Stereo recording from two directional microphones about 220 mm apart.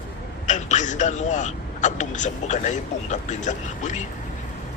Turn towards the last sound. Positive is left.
turn(degrees=35)  # may be behind; listen again after turning